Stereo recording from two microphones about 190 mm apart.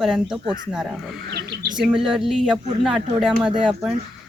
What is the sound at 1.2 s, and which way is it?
Bird, 60° right (ahead or behind).